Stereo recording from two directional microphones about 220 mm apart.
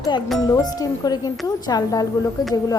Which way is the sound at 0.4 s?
15° left (ahead or behind).